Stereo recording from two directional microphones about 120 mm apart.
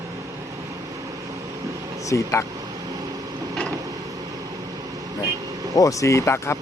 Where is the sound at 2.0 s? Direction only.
25° left (ahead or behind).